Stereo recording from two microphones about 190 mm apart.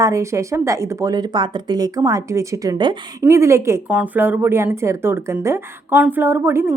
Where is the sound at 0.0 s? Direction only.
15° right (ahead or behind).